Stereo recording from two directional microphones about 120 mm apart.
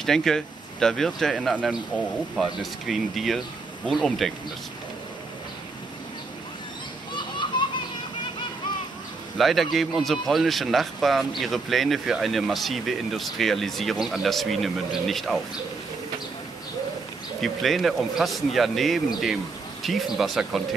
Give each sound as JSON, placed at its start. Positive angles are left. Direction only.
{"t": 0.0, "sound": "speech", "side_deg": 5}
{"t": 7.2, "sound": "children playing", "side_deg": 40}
{"t": 9.4, "sound": "speech", "side_deg": 0}
{"t": 17.4, "sound": "speech", "side_deg": 0}